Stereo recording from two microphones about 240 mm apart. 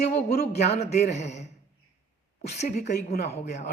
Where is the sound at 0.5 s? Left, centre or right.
Left.